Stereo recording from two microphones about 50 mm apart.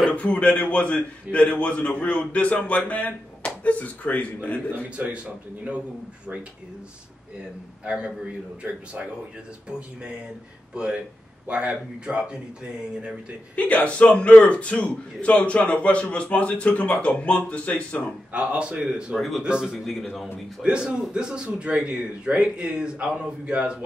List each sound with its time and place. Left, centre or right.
0.1 s a man's voice: left
4.8 s speech: right
7.8 s speech: centre
13.6 s a man's voice: left
18.3 s speech: right
19.1 s speech: centre
19.4 s speech: centre
19.8 s speech: centre
20.6 s speech: centre